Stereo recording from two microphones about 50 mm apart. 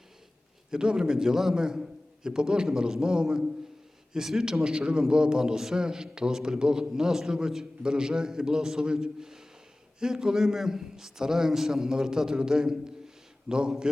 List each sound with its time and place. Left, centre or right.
0.7 s a man's voice: centre